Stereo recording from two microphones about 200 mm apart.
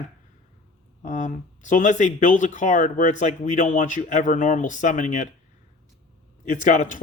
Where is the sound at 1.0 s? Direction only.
40° left (ahead or behind).